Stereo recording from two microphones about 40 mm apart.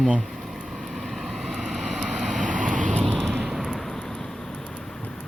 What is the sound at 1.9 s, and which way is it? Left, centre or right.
Vehicle, centre.